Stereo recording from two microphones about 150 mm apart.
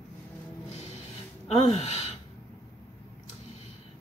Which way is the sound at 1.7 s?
45° left (ahead or behind).